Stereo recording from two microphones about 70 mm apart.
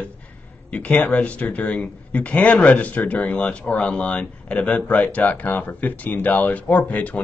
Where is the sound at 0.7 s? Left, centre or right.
Left.